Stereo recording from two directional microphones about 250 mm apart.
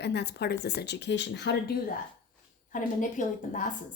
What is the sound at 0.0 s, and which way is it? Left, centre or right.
Speech, left.